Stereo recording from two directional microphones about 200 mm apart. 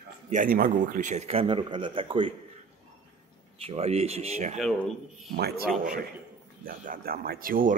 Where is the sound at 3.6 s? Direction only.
30° right (ahead or behind).